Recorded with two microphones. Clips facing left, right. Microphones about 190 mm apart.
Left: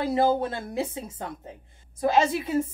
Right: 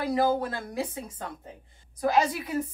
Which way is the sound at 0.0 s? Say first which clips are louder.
Left 2 dB; 25° left (ahead or behind).